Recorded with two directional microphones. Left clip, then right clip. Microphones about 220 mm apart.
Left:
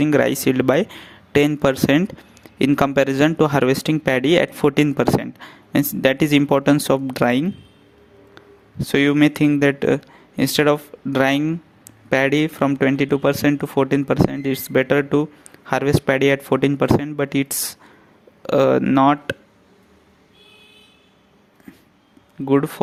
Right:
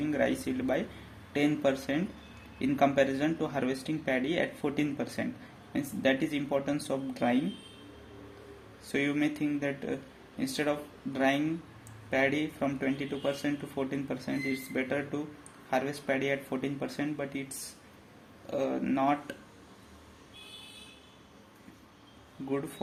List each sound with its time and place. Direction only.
0.0 s speech: 50° left (ahead or behind)
8.9 s speech: 50° left (ahead or behind)
18.4 s speech: 50° left (ahead or behind)